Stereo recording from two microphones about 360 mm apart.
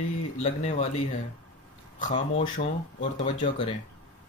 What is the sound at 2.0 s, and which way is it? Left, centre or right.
Speech, left.